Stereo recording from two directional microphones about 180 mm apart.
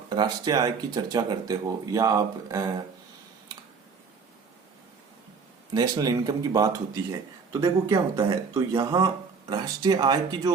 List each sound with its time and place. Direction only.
0.1 s speech: 25° right (ahead or behind)
5.7 s speech: 20° right (ahead or behind)